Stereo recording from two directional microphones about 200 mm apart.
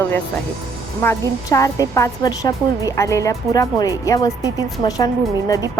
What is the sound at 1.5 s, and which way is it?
A woman's voice, 15° left (ahead or behind).